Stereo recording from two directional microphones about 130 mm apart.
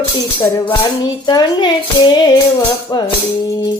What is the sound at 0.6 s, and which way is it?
Speech, 35° left (ahead or behind).